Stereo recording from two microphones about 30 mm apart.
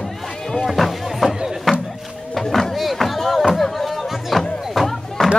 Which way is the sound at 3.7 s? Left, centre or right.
Centre.